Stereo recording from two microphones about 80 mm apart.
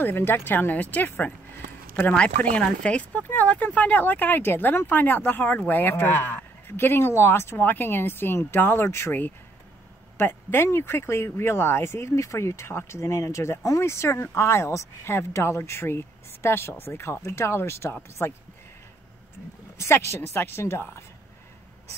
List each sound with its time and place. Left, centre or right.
0.0 s speech: left
19.8 s speech: left